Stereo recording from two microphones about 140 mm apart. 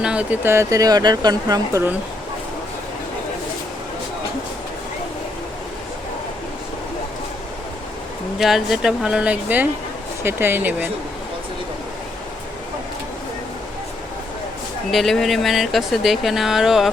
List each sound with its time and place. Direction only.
0.0 s speech: 5° right (ahead or behind); by 1.8 s 30° right (ahead or behind)
8.4 s speech: centre (ahead or behind)
14.9 s speech: centre (ahead or behind)